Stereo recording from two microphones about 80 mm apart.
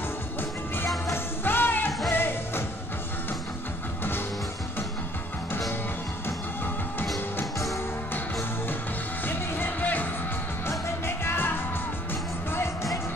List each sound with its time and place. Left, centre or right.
0.8 s music: left
1.4 s music: left
9.2 s music: left